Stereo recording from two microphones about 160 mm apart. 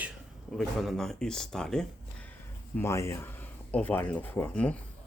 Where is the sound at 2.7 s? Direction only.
15° left (ahead or behind).